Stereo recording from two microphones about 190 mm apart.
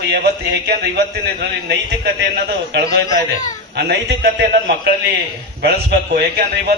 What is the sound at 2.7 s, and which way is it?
A man's voice, 60° right (ahead or behind).